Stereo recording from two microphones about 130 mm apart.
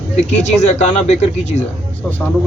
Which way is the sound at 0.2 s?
60° left (ahead or behind).